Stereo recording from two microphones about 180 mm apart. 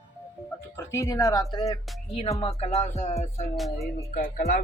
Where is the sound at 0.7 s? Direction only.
15° left (ahead or behind); by 3.1 s 35° left (ahead or behind).